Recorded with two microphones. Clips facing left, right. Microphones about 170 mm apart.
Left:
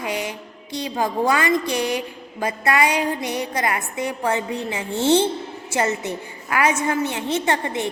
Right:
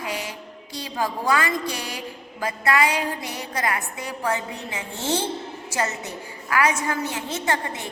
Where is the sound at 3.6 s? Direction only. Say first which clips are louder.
Right 1 dB; 25° left (ahead or behind).